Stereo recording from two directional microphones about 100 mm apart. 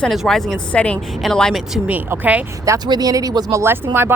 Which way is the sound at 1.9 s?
15° right (ahead or behind).